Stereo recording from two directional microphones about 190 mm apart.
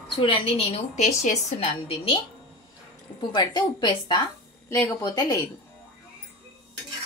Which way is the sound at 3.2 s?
25° left (ahead or behind).